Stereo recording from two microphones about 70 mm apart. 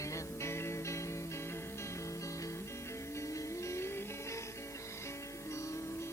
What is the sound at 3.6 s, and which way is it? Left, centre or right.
Music, left.